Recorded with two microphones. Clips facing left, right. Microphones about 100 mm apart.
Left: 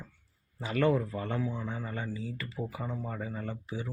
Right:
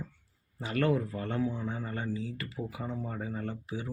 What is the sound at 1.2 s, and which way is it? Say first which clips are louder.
Speech: even; 10° left (ahead or behind).